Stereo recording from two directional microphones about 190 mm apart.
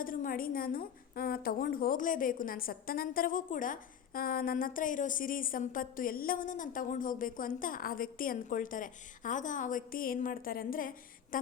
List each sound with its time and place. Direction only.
0.0 s a woman's voice: 45° left (ahead or behind)